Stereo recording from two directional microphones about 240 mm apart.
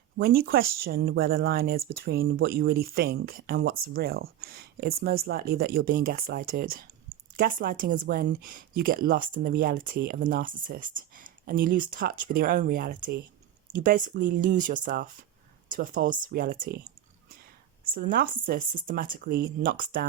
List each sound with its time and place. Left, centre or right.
0.2 s speech: right
17.9 s speech: right